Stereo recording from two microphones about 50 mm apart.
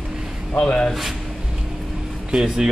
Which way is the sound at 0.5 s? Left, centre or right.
Left.